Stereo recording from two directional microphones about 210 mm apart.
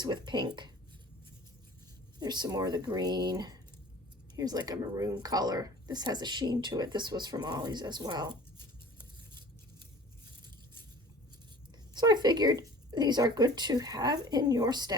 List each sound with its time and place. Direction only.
0.0 s speech: 20° right (ahead or behind)
2.1 s speech: 20° right (ahead or behind)
11.9 s speech: 20° right (ahead or behind)